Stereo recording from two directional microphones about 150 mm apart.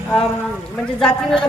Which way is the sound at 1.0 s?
5° left (ahead or behind).